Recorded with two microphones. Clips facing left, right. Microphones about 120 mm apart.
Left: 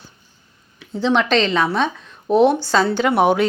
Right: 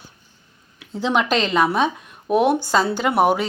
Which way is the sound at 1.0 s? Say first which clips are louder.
Left 3 dB; 10° right (ahead or behind).